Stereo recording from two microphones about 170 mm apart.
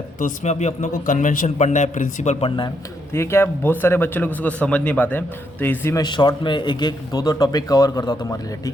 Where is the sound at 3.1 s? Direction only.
15° left (ahead or behind).